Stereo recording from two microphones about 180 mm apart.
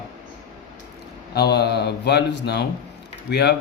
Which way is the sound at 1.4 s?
65° left (ahead or behind).